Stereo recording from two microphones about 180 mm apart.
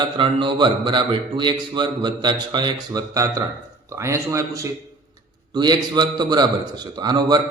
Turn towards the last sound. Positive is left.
turn(degrees=-25)  # may be behind; listen again after turning